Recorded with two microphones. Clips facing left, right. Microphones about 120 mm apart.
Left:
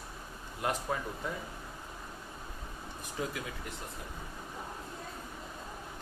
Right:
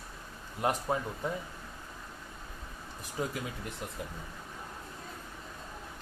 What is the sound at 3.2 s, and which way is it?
Speech, 30° right (ahead or behind).